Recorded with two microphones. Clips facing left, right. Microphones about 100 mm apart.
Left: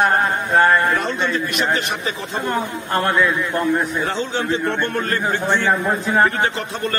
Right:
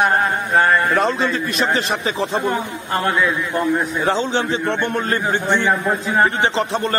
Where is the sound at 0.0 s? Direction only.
Centre (ahead or behind).